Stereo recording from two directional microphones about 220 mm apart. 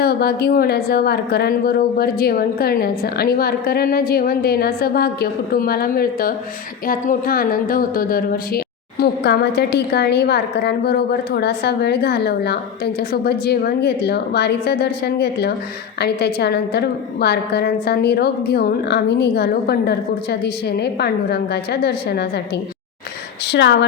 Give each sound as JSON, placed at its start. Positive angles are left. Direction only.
{"t": 0.0, "sound": "a woman's voice", "side_deg": 45}
{"t": 23.5, "sound": "a woman's voice", "side_deg": 55}